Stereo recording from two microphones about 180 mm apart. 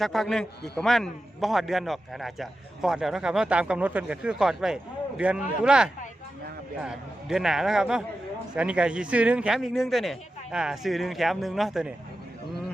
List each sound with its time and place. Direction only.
0.0 s a man's voice: centre (ahead or behind)